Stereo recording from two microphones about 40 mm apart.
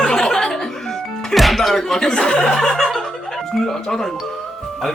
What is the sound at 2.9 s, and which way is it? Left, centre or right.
Music, centre.